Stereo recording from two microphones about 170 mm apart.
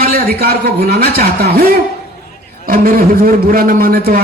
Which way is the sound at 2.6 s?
60° right (ahead or behind).